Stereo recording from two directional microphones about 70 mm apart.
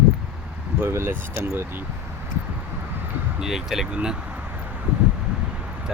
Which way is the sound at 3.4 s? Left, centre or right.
Centre.